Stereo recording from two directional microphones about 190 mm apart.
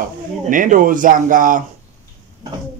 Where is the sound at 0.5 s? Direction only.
45° right (ahead or behind).